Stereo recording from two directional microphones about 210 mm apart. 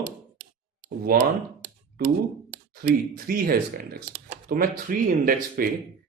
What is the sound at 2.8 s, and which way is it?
Speech, 45° right (ahead or behind).